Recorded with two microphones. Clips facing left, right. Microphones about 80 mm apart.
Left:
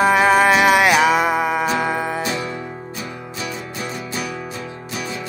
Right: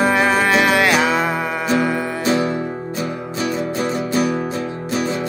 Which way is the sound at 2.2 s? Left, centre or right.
Right.